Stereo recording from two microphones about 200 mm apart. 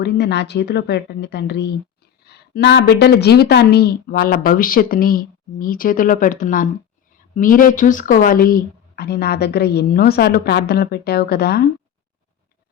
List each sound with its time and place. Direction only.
0.0 s a woman's voice: 60° left (ahead or behind)